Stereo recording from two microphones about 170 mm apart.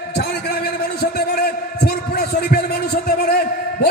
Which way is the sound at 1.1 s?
65° left (ahead or behind).